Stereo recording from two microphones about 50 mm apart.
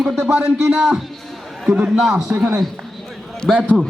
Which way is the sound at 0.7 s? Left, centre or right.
Centre.